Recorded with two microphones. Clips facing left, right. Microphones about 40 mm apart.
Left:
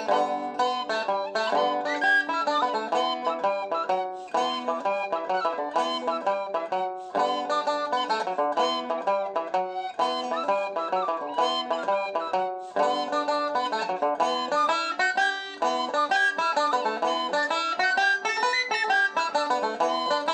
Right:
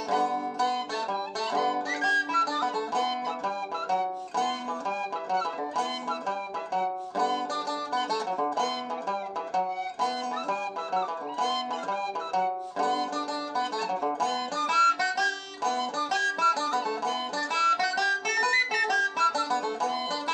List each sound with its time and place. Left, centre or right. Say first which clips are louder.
0.1 s music: left 2 dB; left
18.5 s music: right 1 dB; centre
18.9 s music: left 1 dB; left